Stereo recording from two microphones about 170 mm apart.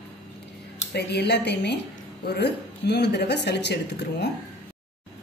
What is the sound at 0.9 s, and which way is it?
A woman's voice, 80° left.